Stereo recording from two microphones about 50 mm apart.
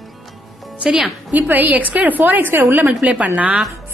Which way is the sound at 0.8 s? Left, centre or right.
Centre.